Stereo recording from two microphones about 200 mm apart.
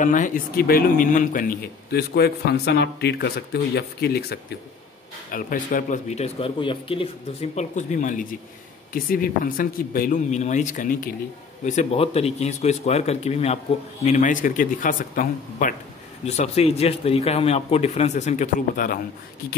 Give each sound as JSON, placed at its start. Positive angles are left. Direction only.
{"t": 0.0, "sound": "speech", "side_deg": 40}